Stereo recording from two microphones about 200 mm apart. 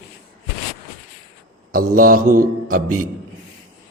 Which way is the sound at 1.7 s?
45° right (ahead or behind).